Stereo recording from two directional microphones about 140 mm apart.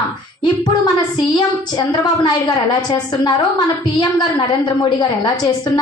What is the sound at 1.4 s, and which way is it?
A woman's voice, 30° left (ahead or behind).